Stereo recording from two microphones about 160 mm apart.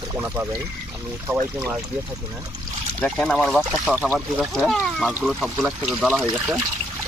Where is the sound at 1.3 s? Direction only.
20° right (ahead or behind).